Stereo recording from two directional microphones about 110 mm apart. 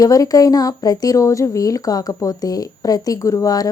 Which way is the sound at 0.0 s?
35° left (ahead or behind).